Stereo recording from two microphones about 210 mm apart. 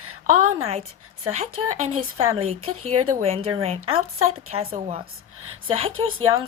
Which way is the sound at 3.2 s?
30° right (ahead or behind).